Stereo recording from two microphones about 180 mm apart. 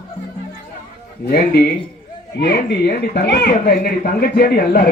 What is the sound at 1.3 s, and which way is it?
Speech, 60° left (ahead or behind).